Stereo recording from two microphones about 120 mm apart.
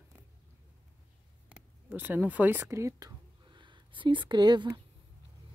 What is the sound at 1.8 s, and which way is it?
Speech, 15° right (ahead or behind).